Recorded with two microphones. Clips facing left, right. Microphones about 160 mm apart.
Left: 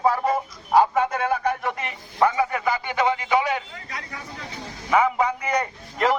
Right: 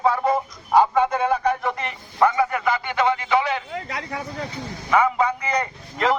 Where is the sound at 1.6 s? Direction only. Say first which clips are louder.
Right 2 dB; 10° left (ahead or behind).